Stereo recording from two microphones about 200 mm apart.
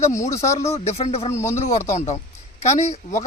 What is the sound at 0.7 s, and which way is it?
Speech, 30° left (ahead or behind).